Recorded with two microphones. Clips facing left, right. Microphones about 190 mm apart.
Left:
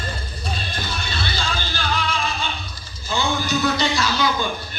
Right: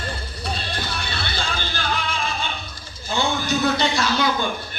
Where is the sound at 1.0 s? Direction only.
60° right (ahead or behind).